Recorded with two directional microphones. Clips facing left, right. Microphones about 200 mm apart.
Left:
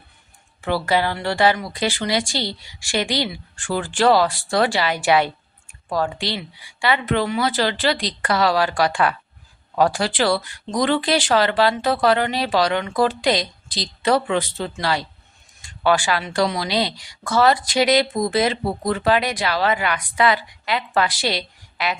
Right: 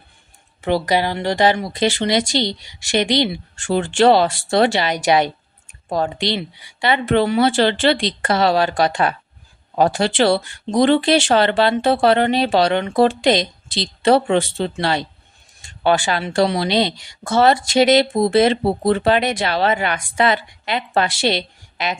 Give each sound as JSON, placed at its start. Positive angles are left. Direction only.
{"t": 0.6, "sound": "speech", "side_deg": -20}